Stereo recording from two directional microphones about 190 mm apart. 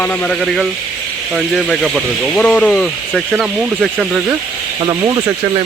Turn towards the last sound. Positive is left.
turn(degrees=-20)  # may be behind; listen again after turning